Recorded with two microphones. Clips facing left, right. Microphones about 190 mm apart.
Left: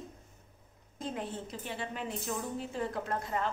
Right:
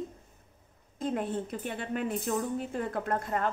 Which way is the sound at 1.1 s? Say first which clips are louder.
Right 7 dB; 55° right (ahead or behind).